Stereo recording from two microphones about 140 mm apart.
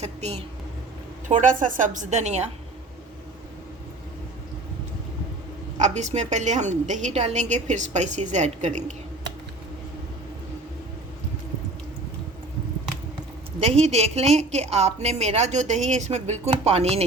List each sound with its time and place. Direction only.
0.0 s a woman's voice: 50° right (ahead or behind)
1.3 s a woman's voice: 65° right (ahead or behind)
5.7 s a woman's voice: 55° right (ahead or behind)
13.6 s a woman's voice: 50° right (ahead or behind)